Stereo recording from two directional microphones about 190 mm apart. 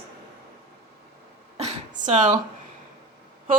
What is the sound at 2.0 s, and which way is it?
Speech, 40° right (ahead or behind).